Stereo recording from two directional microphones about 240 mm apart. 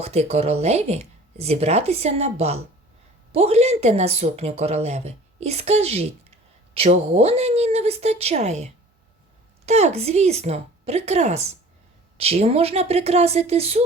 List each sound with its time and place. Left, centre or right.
0.0 s speech: right